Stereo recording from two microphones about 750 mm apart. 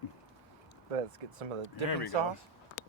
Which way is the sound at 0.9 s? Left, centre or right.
Right.